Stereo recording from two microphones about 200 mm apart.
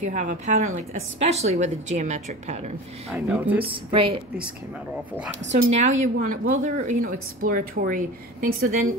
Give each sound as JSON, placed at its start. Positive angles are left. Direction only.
{"t": 0.0, "sound": "a woman's voice", "side_deg": -40}
{"t": 3.1, "sound": "speech", "side_deg": -10}
{"t": 3.6, "sound": "speech", "side_deg": -25}
{"t": 5.5, "sound": "a woman's voice", "side_deg": -35}